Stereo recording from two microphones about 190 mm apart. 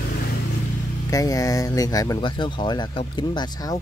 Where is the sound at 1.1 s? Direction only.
20° left (ahead or behind).